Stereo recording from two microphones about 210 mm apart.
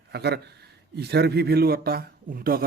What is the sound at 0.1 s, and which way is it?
Speech, 50° right (ahead or behind).